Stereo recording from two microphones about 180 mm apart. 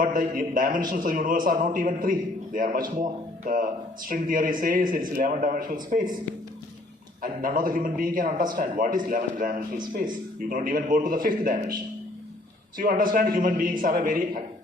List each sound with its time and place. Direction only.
0.0 s a man's voice: 50° right (ahead or behind)
7.2 s a man's voice: 50° right (ahead or behind)